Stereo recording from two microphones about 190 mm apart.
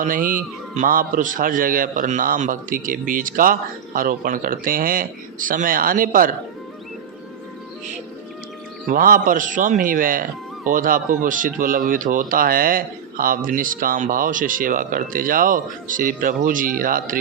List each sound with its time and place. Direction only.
0.0 s speech: 45° right (ahead or behind)
8.9 s speech: 45° right (ahead or behind)